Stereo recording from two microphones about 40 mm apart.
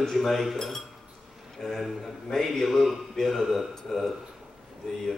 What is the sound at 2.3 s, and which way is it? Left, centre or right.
A man's voice, centre.